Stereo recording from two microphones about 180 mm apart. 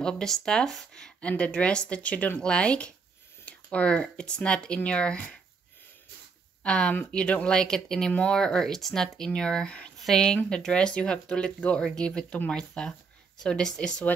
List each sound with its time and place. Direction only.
0.0 s speech: 5° left (ahead or behind)
6.6 s speech: 5° left (ahead or behind)